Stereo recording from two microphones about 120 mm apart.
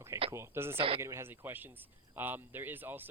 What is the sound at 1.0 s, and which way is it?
Speech, 20° right (ahead or behind).